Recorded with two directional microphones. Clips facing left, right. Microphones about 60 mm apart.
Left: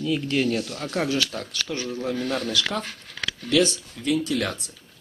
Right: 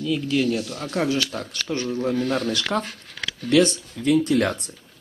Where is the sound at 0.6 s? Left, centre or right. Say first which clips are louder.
Right 1 dB; centre.